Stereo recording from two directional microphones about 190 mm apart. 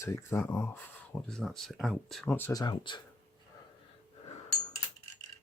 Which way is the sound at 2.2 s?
10° left (ahead or behind).